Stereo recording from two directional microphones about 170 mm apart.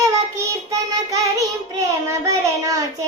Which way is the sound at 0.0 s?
20° right (ahead or behind).